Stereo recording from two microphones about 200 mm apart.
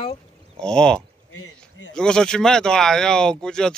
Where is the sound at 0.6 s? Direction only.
5° left (ahead or behind).